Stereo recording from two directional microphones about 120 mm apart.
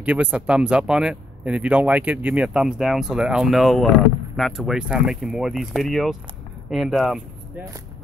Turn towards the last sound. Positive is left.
turn(degrees=0)  # may be behind; listen again after turning